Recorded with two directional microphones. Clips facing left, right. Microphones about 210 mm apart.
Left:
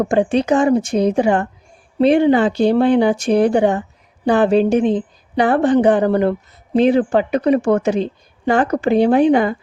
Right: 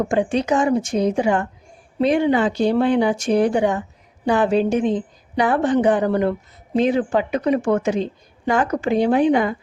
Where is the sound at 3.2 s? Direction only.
65° left (ahead or behind).